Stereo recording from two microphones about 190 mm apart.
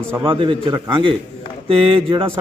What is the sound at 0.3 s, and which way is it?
A man's voice, 25° right (ahead or behind).